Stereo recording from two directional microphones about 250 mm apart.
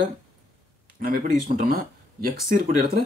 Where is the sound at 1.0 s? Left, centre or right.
Right.